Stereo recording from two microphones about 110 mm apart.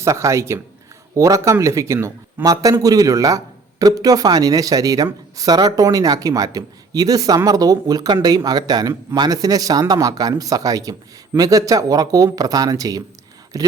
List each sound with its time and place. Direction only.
0.0 s a man's voice: 25° right (ahead or behind)